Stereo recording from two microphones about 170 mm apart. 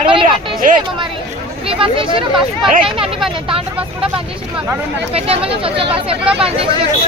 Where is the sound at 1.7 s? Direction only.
30° right (ahead or behind).